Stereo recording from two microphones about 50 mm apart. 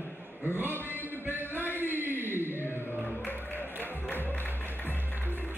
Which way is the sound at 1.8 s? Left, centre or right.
Right.